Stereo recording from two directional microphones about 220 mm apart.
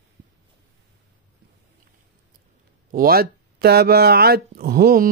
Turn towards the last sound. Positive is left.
turn(degrees=-40)  # may be behind; listen again after turning